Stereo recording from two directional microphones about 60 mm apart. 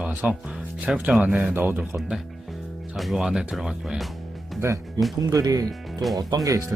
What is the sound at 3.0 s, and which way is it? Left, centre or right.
Speech, centre.